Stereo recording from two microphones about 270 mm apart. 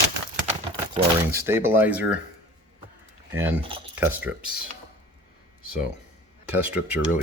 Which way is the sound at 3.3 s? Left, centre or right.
Centre.